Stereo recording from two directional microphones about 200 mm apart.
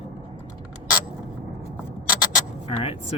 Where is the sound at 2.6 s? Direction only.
30° left (ahead or behind).